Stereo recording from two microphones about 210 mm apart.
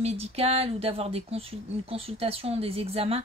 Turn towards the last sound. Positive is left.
turn(degrees=-30)  # may be behind; listen again after turning